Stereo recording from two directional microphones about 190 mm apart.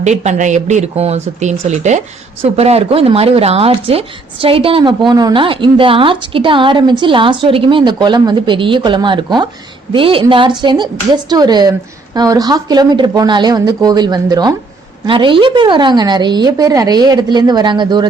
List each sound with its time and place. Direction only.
0.0 s speech: 40° right (ahead or behind)